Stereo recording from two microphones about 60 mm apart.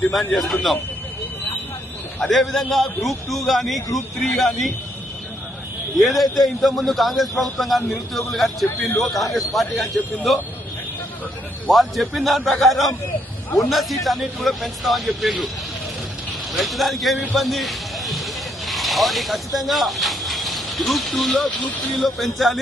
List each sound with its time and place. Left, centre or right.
0.1 s a man's voice: centre
2.2 s a man's voice: centre
6.0 s a man's voice: centre
11.7 s a man's voice: centre
16.5 s a man's voice: centre
18.6 s snake: centre
19.5 s a man's voice: centre